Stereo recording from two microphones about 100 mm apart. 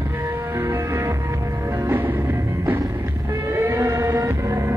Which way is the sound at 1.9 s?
20° right (ahead or behind).